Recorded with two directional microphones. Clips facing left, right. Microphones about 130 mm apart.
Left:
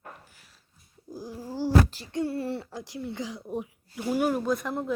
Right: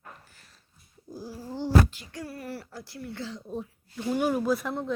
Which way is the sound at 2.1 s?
25° left (ahead or behind).